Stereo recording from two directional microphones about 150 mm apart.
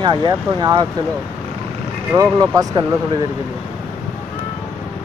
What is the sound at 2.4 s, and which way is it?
Speech, 25° right (ahead or behind).